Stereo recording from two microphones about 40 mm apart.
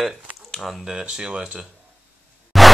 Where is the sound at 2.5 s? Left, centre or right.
Centre.